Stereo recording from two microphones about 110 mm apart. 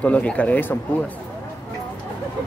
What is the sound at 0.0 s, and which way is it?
Speech, 10° left (ahead or behind).